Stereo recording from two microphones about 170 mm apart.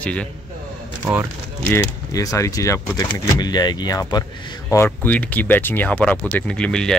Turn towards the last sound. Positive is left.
turn(degrees=5)  # may be behind; listen again after turning